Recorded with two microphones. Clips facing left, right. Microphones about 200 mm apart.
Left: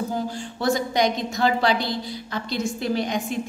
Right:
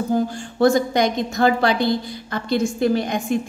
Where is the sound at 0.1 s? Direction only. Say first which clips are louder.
Right 7 dB; 50° right (ahead or behind).